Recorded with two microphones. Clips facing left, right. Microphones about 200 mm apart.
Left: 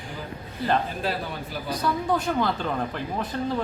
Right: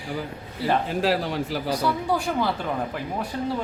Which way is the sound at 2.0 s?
10° right (ahead or behind).